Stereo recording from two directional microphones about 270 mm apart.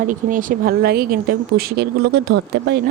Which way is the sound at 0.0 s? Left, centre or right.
Right.